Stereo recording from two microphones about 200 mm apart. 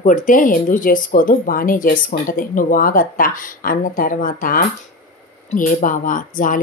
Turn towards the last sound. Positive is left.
turn(degrees=40)  # may be behind; listen again after turning